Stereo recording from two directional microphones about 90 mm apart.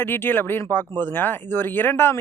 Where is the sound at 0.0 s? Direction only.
25° left (ahead or behind).